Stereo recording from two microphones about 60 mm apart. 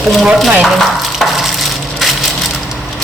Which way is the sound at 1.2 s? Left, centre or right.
Centre.